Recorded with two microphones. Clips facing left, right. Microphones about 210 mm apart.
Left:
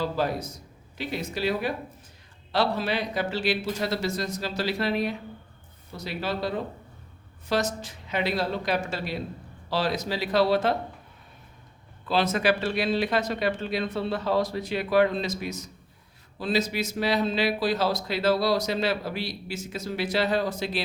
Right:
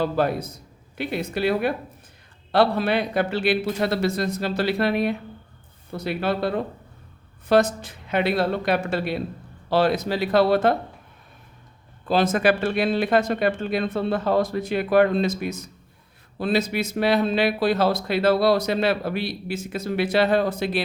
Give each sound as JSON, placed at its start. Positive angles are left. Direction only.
{"t": 0.0, "sound": "speech", "side_deg": -60}
{"t": 12.0, "sound": "speech", "side_deg": -45}